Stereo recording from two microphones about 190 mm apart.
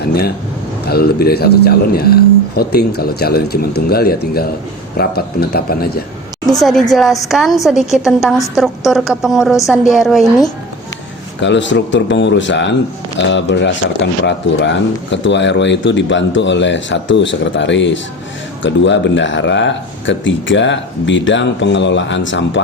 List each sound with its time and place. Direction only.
0.0 s speech: 55° left (ahead or behind)
6.6 s a woman's voice: centre (ahead or behind)
11.3 s speech: 70° left (ahead or behind)